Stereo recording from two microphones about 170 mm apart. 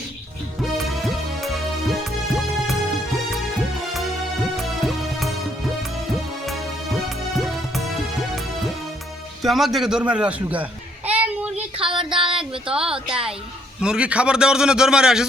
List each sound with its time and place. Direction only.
0.8 s music: centre (ahead or behind)
4.9 s music: centre (ahead or behind)
9.4 s speech: centre (ahead or behind)
11.8 s a sound: 30° right (ahead or behind)
12.7 s a man's voice: 5° right (ahead or behind)